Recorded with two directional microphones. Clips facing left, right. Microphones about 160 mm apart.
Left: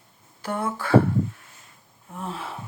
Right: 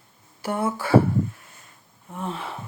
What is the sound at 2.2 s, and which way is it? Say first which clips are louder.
Gasp: right 2 dB; centre (ahead or behind).